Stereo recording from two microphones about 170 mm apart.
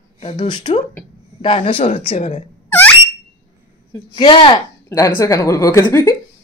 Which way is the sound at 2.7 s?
10° left (ahead or behind).